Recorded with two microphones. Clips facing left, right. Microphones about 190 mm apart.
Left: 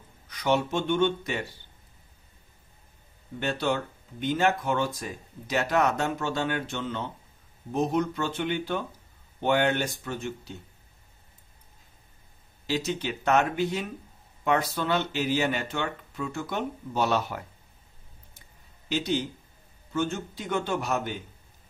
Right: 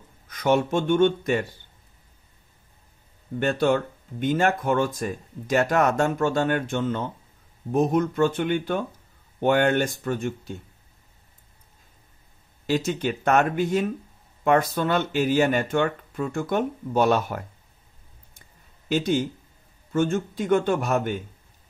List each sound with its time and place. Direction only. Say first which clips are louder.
0.3 s speech: right 4 dB; 50° right (ahead or behind)
3.3 s speech: right 6 dB; 50° right (ahead or behind)
12.6 s speech: right 5 dB; 50° right (ahead or behind)
18.9 s speech: right 5 dB; 50° right (ahead or behind)